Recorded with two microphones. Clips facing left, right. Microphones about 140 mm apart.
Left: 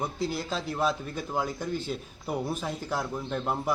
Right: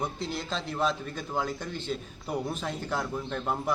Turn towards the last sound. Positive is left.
turn(degrees=5)  # may be behind; listen again after turning